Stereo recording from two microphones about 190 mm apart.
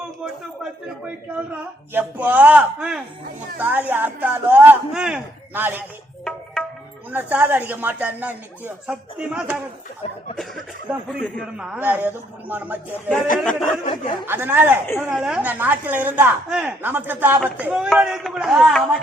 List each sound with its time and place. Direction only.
1.9 s a woman's voice: 10° right (ahead or behind)
6.2 s music: centre (ahead or behind)
7.1 s a woman's voice: 10° right (ahead or behind)
11.5 s a woman's voice: 5° right (ahead or behind)
13.8 s speech: 25° left (ahead or behind)
14.3 s a woman's voice: 10° right (ahead or behind)
14.8 s speech: 10° left (ahead or behind)
15.1 s a woman's voice: 5° right (ahead or behind)